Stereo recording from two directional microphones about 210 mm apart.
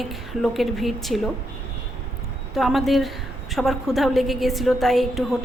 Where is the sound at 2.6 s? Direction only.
Centre (ahead or behind).